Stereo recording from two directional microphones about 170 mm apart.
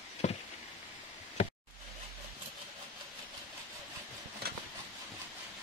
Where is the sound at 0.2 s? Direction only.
40° left (ahead or behind).